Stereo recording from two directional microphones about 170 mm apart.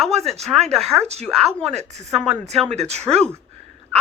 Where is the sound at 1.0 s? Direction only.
40° right (ahead or behind).